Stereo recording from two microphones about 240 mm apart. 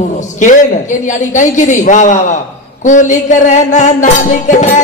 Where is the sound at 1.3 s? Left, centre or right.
Left.